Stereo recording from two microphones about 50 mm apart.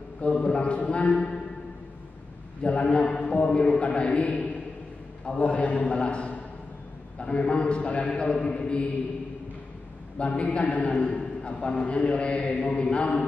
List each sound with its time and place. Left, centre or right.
0.2 s a man's voice: centre
2.6 s a man's voice: left
10.1 s a man's voice: left